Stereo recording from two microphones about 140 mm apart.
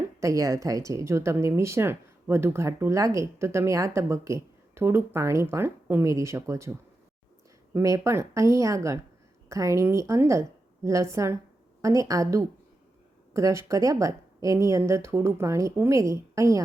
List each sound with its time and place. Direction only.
0.2 s a woman's voice: 20° right (ahead or behind)